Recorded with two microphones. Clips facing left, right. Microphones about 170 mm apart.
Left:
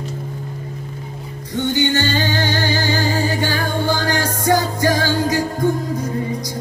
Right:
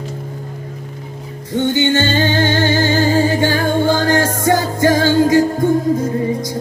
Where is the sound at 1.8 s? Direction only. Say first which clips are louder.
Right 3 dB; 25° right (ahead or behind).